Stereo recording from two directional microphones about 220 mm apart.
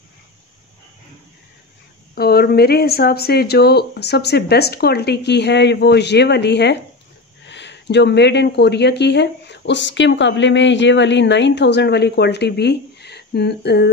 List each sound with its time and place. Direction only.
2.1 s speech: 45° left (ahead or behind)